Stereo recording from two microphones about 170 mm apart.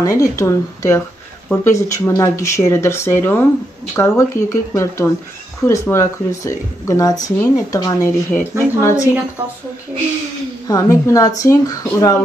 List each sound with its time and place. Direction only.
0.0 s speech: 20° left (ahead or behind)
10.7 s speech: 20° left (ahead or behind)